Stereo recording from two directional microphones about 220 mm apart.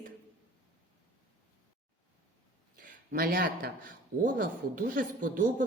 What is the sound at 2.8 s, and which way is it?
Speech, 40° right (ahead or behind).